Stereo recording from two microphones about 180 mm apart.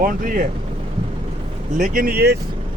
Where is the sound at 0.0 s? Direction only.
50° right (ahead or behind).